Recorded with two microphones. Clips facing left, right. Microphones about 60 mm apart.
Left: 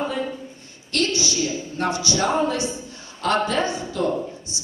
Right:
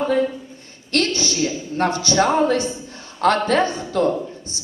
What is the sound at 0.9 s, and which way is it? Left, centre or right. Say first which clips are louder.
A woman's voice: right 2 dB; right.